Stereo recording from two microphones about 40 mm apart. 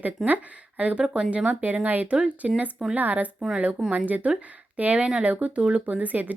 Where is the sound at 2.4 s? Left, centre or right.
Centre.